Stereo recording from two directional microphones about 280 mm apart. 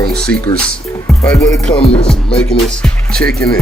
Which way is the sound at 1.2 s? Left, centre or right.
Centre.